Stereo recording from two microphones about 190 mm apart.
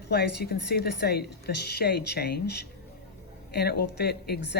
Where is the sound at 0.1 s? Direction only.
55° left (ahead or behind).